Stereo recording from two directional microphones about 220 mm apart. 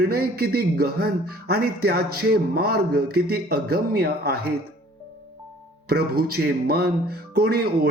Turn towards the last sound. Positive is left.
turn(degrees=-45)  # may be behind; listen again after turning